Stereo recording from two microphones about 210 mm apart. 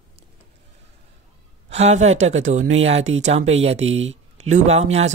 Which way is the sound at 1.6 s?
30° right (ahead or behind).